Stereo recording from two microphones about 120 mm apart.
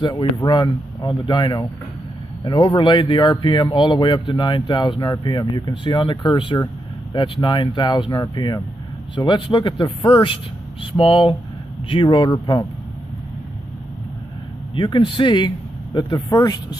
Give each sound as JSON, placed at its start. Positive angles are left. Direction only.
{"t": 0.4, "sound": "a man's voice", "side_deg": 35}
{"t": 14.8, "sound": "speech", "side_deg": 40}